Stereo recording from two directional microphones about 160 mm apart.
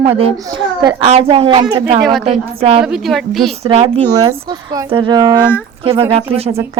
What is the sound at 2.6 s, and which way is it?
Speech, 35° right (ahead or behind).